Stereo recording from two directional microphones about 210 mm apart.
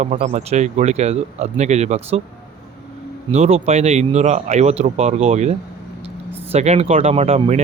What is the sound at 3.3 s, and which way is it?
Speech, 30° right (ahead or behind).